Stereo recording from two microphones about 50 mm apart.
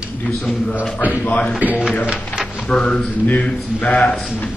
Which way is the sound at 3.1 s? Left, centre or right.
Left.